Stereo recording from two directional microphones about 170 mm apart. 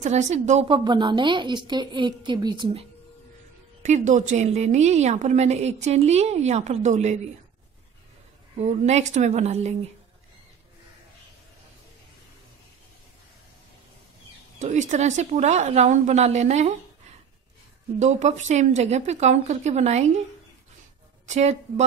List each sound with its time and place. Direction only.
0.0 s a woman's voice: 45° right (ahead or behind)
0.7 s a woman's voice: 25° right (ahead or behind)
3.8 s a woman's voice: 45° right (ahead or behind)
8.5 s a woman's voice: 40° right (ahead or behind)
14.6 s a woman's voice: 45° right (ahead or behind)
17.9 s a woman's voice: 45° right (ahead or behind)
21.3 s a woman's voice: 40° right (ahead or behind)